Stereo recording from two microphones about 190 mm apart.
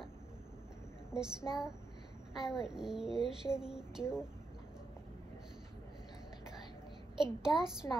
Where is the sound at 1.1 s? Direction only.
5° right (ahead or behind).